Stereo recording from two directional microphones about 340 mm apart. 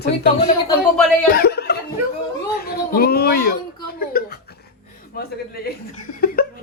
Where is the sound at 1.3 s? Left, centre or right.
Left.